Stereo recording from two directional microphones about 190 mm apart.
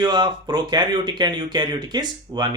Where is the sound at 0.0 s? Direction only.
20° right (ahead or behind).